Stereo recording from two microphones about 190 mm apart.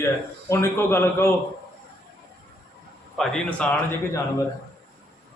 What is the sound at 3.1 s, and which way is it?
Speech, centre (ahead or behind).